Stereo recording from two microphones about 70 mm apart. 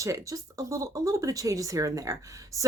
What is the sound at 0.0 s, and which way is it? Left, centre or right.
Speech, right.